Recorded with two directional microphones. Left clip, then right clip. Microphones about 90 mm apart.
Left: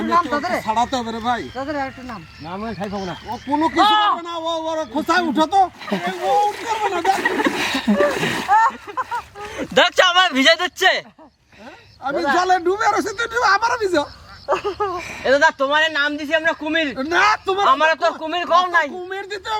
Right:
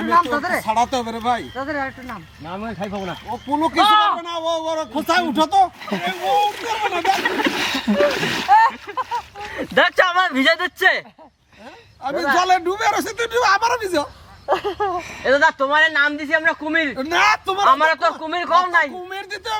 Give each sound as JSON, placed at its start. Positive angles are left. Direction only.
{"t": 0.0, "sound": "speech", "side_deg": 20}
{"t": 0.6, "sound": "a woman's voice", "side_deg": -15}
{"t": 1.5, "sound": "a man's voice", "side_deg": 15}
{"t": 2.5, "sound": "a woman's voice", "side_deg": -5}
{"t": 6.9, "sound": "a woman's voice", "side_deg": -15}
{"t": 7.2, "sound": "a man's voice", "side_deg": 5}
{"t": 8.4, "sound": "a sound", "side_deg": -30}
{"t": 9.5, "sound": "speech", "side_deg": 30}
{"t": 12.0, "sound": "a woman's voice", "side_deg": -15}
{"t": 14.5, "sound": "speech", "side_deg": -30}
{"t": 14.9, "sound": "a man's voice", "side_deg": 15}
{"t": 17.0, "sound": "a woman's voice", "side_deg": -15}
{"t": 17.6, "sound": "a man's voice", "side_deg": 20}
{"t": 19.0, "sound": "a woman's voice", "side_deg": -15}